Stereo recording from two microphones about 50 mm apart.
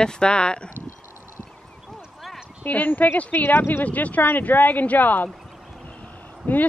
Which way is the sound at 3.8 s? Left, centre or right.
Left.